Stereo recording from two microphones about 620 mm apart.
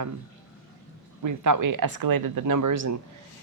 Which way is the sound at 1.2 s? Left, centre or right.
Right.